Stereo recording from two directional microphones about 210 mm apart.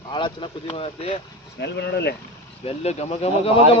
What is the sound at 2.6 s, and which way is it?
Speech, 30° left (ahead or behind).